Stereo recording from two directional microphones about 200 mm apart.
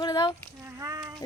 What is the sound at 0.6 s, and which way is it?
Speech, 15° right (ahead or behind).